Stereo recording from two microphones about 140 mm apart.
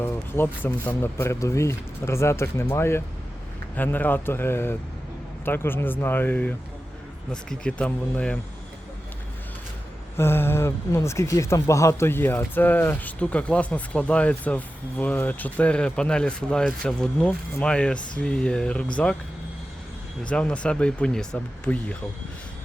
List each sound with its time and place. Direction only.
0.0 s speech: 15° left (ahead or behind)
10.2 s speech: 15° left (ahead or behind)
20.2 s speech: 10° left (ahead or behind)